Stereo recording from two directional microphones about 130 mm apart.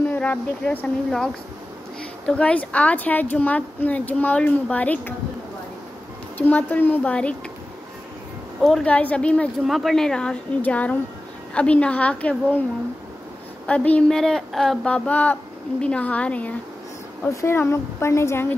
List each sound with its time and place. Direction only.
0.1 s speech: 10° left (ahead or behind)
6.3 s speech: 10° left (ahead or behind)
8.5 s speech: centre (ahead or behind)
13.7 s speech: 10° left (ahead or behind)
17.3 s speech: 20° left (ahead or behind)